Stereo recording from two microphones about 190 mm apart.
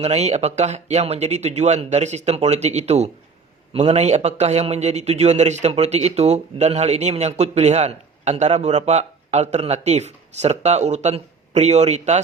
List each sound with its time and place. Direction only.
0.0 s a man's voice: 35° right (ahead or behind)